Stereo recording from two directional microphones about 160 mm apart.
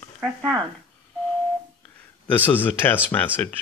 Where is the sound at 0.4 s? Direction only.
25° right (ahead or behind).